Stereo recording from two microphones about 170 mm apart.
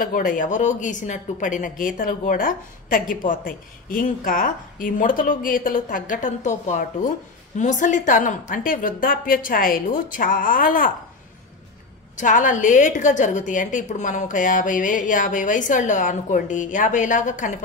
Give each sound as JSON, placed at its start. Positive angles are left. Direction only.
{"t": 0.0, "sound": "a woman's voice", "side_deg": 55}
{"t": 12.2, "sound": "speech", "side_deg": 50}